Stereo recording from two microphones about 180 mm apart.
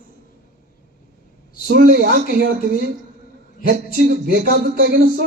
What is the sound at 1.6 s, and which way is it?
Speech, 55° right (ahead or behind).